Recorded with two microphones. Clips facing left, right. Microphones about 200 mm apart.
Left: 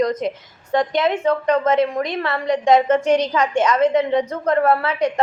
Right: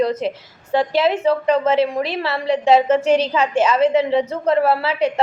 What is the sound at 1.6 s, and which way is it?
A woman's voice, 25° right (ahead or behind).